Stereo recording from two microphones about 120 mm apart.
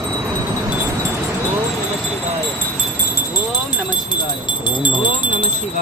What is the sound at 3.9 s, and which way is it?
Wind chime, 40° left (ahead or behind).